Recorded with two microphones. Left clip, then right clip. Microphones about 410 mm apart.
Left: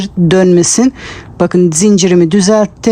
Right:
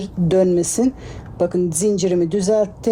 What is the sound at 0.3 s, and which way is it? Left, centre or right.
Speech, left.